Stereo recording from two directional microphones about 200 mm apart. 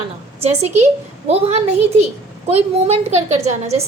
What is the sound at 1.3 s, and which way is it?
A woman's voice, 30° right (ahead or behind).